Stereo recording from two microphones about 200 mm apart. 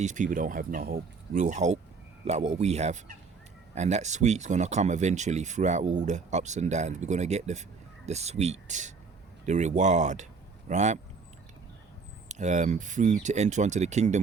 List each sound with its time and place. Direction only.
0.0 s speech: 40° right (ahead or behind)
12.3 s speech: 35° right (ahead or behind)